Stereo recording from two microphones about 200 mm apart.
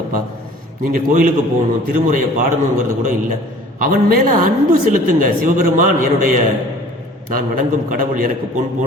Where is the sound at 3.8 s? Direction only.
45° right (ahead or behind).